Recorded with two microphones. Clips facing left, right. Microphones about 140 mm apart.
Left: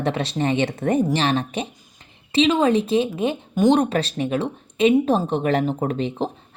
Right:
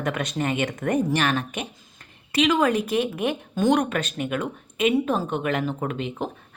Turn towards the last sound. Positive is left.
turn(degrees=30)  # may be behind; listen again after turning